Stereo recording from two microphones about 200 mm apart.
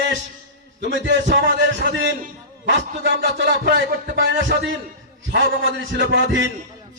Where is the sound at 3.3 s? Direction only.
60° right (ahead or behind).